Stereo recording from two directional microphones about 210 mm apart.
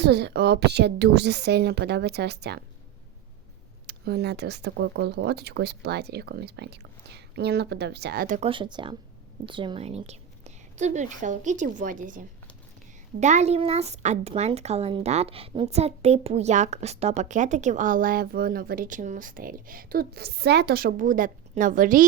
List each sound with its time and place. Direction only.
0.0 s speech: 50° right (ahead or behind)
3.8 s speech: 50° right (ahead or behind)
8.4 s a woman's voice: 25° right (ahead or behind); by 22.0 s 40° right (ahead or behind)